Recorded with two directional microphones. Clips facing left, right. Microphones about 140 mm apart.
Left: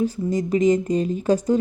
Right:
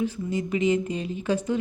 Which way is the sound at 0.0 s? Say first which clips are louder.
Left 5 dB; 40° left (ahead or behind).